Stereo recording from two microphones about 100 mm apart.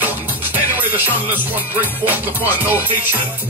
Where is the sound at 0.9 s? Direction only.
20° right (ahead or behind).